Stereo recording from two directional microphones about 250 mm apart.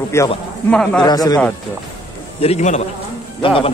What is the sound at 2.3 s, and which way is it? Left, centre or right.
A man's voice, left.